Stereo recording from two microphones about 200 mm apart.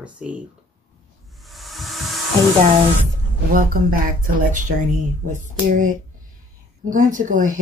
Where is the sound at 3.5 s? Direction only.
45° right (ahead or behind).